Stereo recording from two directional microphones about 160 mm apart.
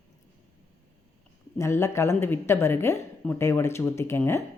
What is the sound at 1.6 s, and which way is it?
Speech, 15° left (ahead or behind).